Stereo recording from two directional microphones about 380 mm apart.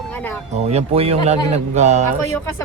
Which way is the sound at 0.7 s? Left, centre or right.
Centre.